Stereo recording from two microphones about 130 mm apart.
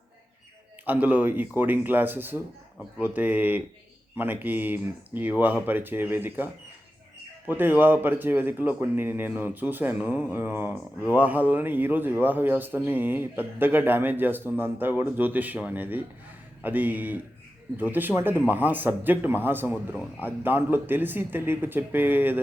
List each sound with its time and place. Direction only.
0.9 s a man's voice: 10° right (ahead or behind)